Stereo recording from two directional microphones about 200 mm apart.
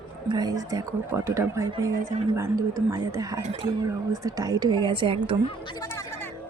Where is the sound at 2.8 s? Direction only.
15° right (ahead or behind).